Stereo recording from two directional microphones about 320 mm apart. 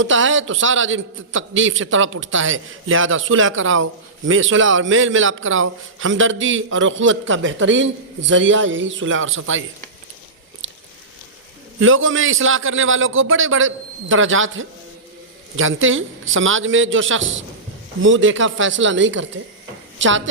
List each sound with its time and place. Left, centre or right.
0.0 s a man's voice: right
10.6 s biting: right
11.8 s a man's voice: right